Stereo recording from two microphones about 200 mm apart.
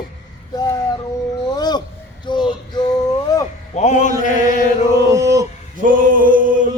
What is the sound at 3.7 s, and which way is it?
Mantra, 35° left (ahead or behind).